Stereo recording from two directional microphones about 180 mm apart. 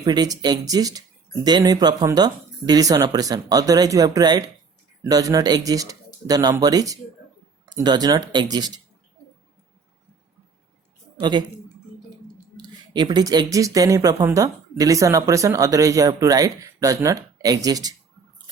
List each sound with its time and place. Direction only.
0.0 s speech: 20° right (ahead or behind)
11.2 s speech: 25° right (ahead or behind)
12.5 s speech: 25° right (ahead or behind)